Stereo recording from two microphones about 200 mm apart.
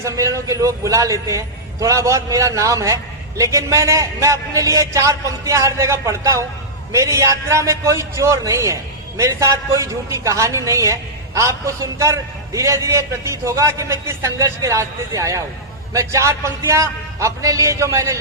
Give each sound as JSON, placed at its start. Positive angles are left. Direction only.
{"t": 0.0, "sound": "a man's voice", "side_deg": -15}